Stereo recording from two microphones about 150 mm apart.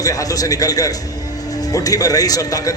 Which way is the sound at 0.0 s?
25° left (ahead or behind).